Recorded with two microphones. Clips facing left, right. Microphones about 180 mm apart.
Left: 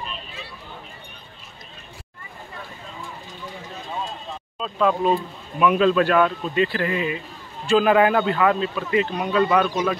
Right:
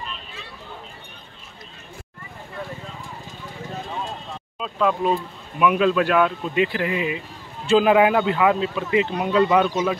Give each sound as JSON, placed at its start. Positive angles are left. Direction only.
{"t": 4.6, "sound": "speech", "side_deg": -5}